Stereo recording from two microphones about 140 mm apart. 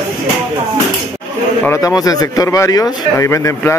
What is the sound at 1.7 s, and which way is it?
Speech, 25° left (ahead or behind).